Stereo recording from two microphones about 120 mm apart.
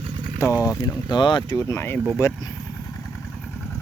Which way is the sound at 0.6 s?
40° left (ahead or behind).